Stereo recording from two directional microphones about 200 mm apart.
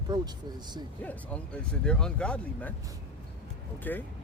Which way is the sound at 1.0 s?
5° left (ahead or behind).